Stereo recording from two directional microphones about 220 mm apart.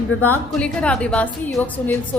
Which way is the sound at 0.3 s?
5° left (ahead or behind).